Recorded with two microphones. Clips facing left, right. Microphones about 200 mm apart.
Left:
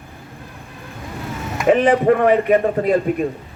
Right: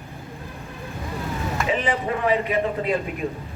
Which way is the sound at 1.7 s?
60° left (ahead or behind).